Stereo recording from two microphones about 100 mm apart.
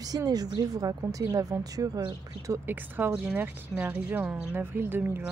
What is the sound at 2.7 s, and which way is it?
Speech, 20° right (ahead or behind).